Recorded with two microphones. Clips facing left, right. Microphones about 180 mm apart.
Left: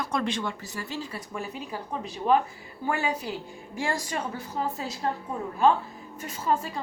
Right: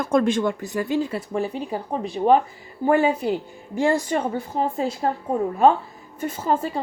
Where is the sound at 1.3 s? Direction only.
35° right (ahead or behind); by 4.9 s 55° right (ahead or behind).